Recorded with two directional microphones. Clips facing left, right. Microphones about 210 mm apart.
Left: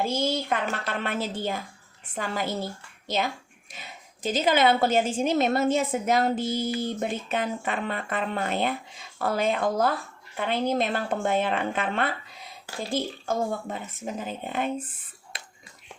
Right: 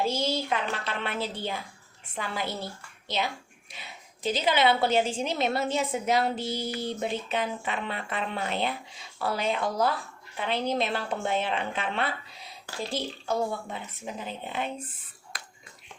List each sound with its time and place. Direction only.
0.0 s a woman's voice: 50° left (ahead or behind)
3.7 s a woman's voice: 45° left (ahead or behind)